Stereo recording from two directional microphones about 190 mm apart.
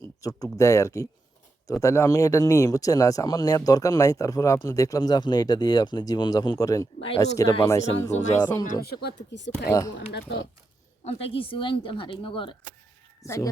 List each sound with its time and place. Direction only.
0.2 s speech: 20° left (ahead or behind)
8.1 s speech: 35° left (ahead or behind)
8.4 s speech: 20° left (ahead or behind)
8.6 s speech: 50° left (ahead or behind)
11.0 s speech: 30° left (ahead or behind)
13.2 s speech: 15° left (ahead or behind)